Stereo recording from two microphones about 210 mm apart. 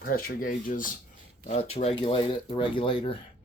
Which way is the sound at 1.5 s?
30° left (ahead or behind).